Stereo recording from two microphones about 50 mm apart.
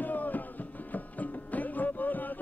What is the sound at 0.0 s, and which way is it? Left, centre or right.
Music, left.